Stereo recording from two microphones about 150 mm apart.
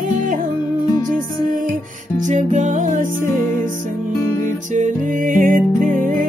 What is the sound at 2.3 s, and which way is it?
Music, 55° right (ahead or behind).